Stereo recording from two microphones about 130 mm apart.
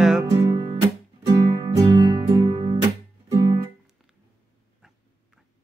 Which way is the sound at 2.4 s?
40° right (ahead or behind).